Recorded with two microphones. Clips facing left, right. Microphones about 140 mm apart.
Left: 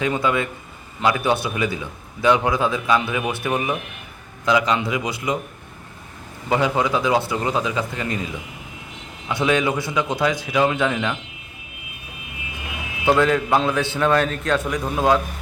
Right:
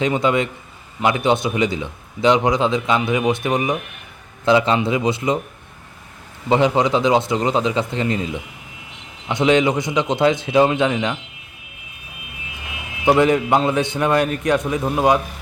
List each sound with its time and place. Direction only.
0.0 s a man's voice: 20° right (ahead or behind)
6.5 s a man's voice: 25° right (ahead or behind)
13.1 s a man's voice: 20° right (ahead or behind)